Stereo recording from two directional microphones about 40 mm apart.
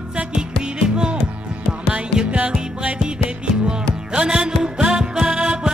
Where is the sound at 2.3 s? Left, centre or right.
Right.